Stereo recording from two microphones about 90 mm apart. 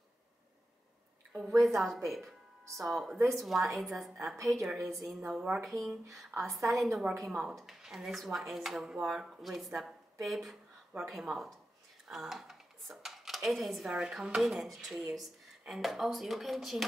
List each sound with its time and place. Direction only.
1.6 s a woman's voice: centre (ahead or behind)
5.6 s speech: centre (ahead or behind)
6.3 s a woman's voice: 30° right (ahead or behind)
6.7 s speech: centre (ahead or behind)